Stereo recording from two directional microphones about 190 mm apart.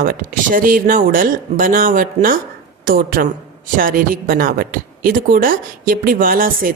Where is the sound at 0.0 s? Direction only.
50° right (ahead or behind).